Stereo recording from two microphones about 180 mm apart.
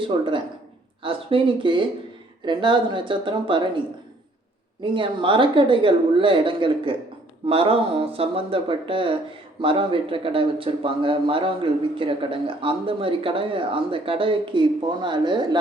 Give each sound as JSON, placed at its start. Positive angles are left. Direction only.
{"t": 0.0, "sound": "speech", "side_deg": -25}
{"t": 4.8, "sound": "speech", "side_deg": -25}